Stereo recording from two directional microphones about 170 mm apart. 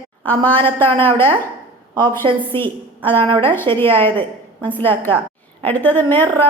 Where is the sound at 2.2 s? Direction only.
30° right (ahead or behind).